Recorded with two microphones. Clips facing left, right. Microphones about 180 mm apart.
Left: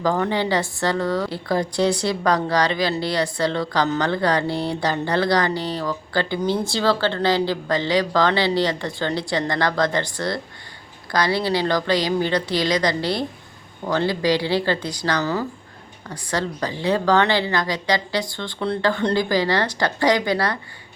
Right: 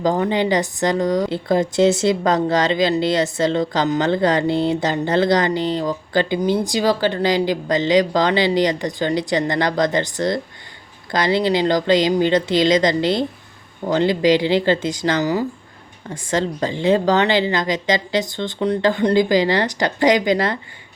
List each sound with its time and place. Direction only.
0.0 s a woman's voice: 20° right (ahead or behind)